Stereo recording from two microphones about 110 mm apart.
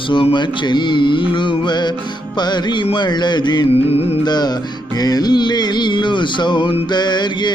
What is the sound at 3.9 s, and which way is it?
Music, 65° left (ahead or behind).